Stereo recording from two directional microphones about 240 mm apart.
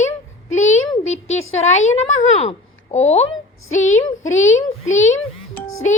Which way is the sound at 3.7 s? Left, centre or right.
Left.